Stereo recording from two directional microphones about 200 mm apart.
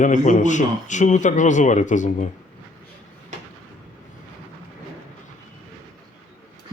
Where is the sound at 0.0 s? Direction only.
40° left (ahead or behind).